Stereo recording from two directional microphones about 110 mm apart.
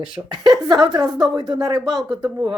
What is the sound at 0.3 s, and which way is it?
Speech, 40° right (ahead or behind).